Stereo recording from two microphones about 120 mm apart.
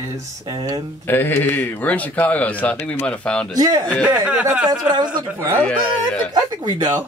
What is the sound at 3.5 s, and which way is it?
Speech, 35° right (ahead or behind).